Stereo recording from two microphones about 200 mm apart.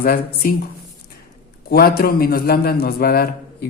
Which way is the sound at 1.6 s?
50° left (ahead or behind).